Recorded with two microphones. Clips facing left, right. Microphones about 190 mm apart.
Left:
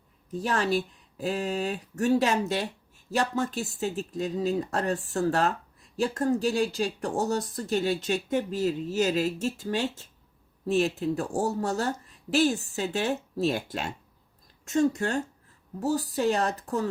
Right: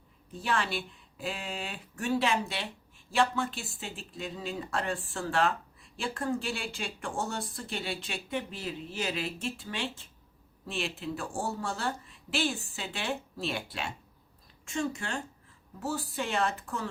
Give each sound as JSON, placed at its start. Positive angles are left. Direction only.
{"t": 0.3, "sound": "a woman's voice", "side_deg": 40}